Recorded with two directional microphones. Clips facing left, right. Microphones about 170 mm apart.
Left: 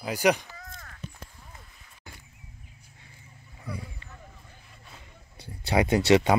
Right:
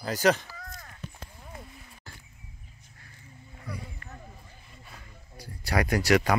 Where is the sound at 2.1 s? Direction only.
15° left (ahead or behind).